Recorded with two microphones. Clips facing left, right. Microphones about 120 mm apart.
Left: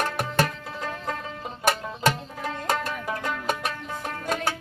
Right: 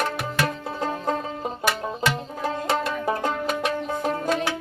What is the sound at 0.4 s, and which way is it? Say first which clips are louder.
Music: right 5 dB; 30° right (ahead or behind).